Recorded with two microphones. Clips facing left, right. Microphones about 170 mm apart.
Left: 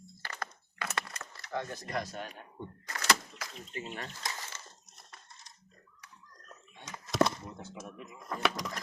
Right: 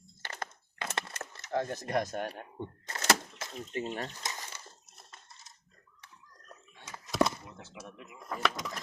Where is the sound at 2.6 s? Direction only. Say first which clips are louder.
Right 2 dB; 25° right (ahead or behind).